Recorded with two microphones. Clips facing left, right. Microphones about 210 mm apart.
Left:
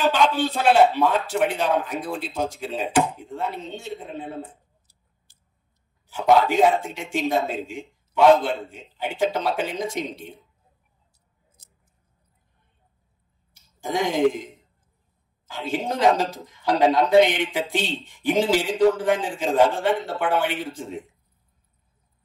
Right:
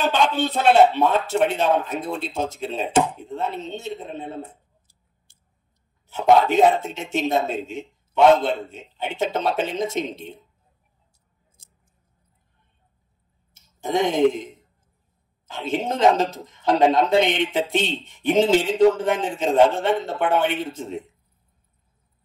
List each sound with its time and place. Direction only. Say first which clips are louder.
0.0 s speech: even; 25° right (ahead or behind)
6.0 s speech: right 1 dB; 25° right (ahead or behind)
13.5 s speech: right 3 dB; 25° right (ahead or behind)